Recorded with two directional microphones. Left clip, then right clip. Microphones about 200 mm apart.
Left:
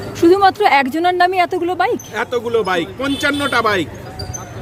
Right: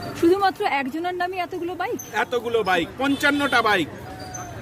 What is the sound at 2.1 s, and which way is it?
A man's voice, centre (ahead or behind).